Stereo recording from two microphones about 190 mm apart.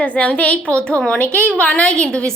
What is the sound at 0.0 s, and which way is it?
A woman's voice, 5° left (ahead or behind).